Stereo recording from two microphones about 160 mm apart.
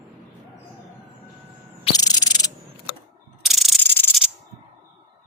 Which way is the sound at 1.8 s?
25° left (ahead or behind).